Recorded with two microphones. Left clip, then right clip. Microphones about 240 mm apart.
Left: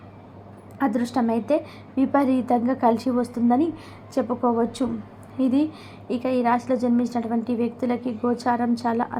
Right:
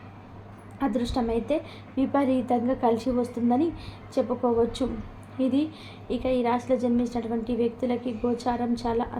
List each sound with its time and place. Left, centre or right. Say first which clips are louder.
0.8 s a woman's voice: left 4 dB; left